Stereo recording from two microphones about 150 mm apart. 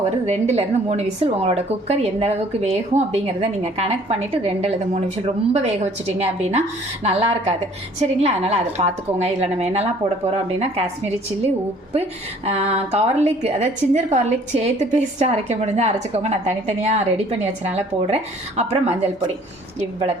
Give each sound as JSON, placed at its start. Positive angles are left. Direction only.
{"t": 0.3, "sound": "a woman's voice", "side_deg": -45}